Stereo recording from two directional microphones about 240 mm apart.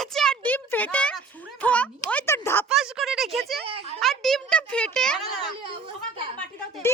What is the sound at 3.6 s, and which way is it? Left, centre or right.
Speech, right.